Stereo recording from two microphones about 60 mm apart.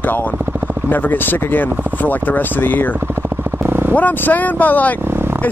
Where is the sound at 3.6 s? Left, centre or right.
Right.